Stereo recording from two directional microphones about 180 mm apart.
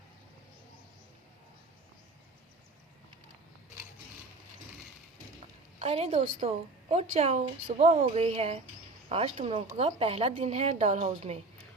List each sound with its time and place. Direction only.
5.8 s speech: 35° right (ahead or behind)